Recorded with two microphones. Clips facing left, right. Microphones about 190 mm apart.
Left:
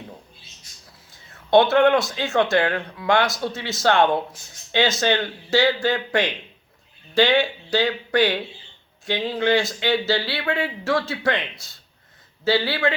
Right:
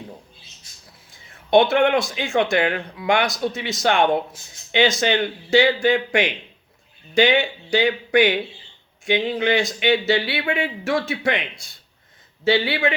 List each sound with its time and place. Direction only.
1.7 s a man's voice: 15° right (ahead or behind)
12.5 s a man's voice: 20° right (ahead or behind)